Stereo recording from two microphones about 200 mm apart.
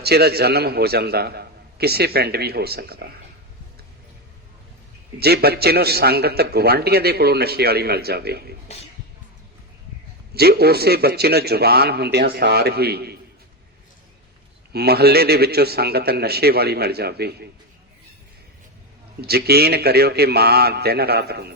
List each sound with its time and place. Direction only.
0.0 s a man's voice: 55° right (ahead or behind)
5.2 s a man's voice: 55° right (ahead or behind)
8.6 s speech: 30° left (ahead or behind)
10.3 s a man's voice: 50° right (ahead or behind)
14.7 s a man's voice: 55° right (ahead or behind)
19.2 s a man's voice: 55° right (ahead or behind)